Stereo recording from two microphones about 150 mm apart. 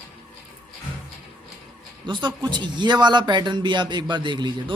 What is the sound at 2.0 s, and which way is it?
Speech, 30° right (ahead or behind).